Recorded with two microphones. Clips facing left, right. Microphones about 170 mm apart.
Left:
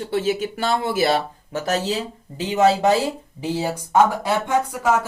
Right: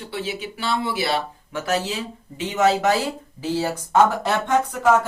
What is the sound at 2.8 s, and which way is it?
Speech, 20° left (ahead or behind).